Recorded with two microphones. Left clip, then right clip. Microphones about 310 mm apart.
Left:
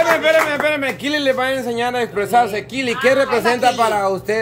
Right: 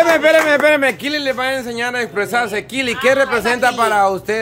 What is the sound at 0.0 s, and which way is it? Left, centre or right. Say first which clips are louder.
Speech: right 3 dB; centre.